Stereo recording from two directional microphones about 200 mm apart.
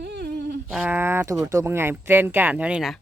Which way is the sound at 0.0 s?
55° right (ahead or behind).